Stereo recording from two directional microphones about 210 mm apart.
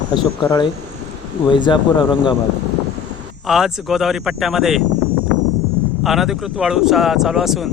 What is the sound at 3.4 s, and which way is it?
Speech, centre (ahead or behind).